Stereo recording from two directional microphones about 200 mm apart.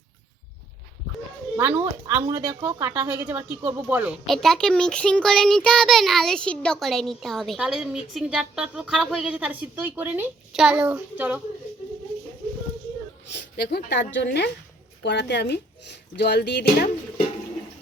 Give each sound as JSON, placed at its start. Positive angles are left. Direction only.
{"t": 1.5, "sound": "speech", "side_deg": -10}
{"t": 13.6, "sound": "speech", "side_deg": 55}